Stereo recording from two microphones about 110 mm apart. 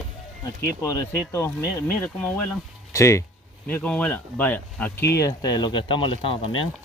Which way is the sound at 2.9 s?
25° left (ahead or behind).